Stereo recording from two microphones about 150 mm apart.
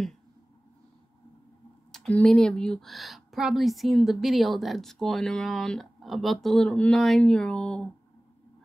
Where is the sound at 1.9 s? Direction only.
5° left (ahead or behind).